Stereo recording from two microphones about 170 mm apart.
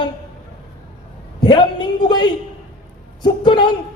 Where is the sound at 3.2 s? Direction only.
25° left (ahead or behind).